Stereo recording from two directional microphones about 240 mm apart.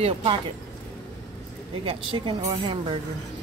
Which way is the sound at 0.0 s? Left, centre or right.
Right.